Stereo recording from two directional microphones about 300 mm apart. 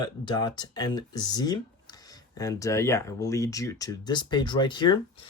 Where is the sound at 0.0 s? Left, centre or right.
Centre.